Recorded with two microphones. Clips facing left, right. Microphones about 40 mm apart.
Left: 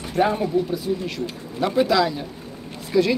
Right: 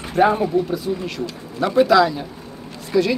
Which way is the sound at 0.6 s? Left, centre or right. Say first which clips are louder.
Right 1 dB; centre.